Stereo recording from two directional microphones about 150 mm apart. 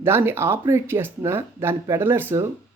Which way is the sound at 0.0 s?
15° right (ahead or behind).